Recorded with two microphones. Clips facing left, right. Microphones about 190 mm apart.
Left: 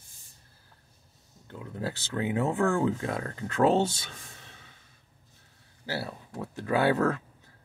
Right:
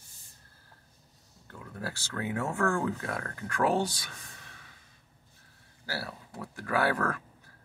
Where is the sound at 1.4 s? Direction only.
20° left (ahead or behind).